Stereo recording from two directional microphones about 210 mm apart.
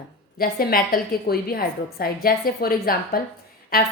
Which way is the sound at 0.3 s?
45° left (ahead or behind).